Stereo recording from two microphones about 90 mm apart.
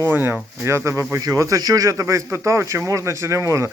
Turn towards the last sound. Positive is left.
turn(degrees=-35)  # may be behind; listen again after turning